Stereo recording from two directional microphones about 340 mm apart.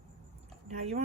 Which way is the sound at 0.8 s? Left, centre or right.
Centre.